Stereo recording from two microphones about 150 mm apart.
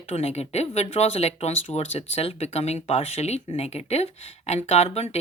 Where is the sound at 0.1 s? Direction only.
45° left (ahead or behind).